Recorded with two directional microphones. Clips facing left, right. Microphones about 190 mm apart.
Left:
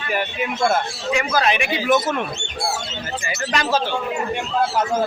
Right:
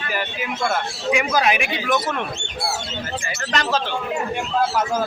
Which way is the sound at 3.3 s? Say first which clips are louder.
Left 2 dB; 10° left (ahead or behind).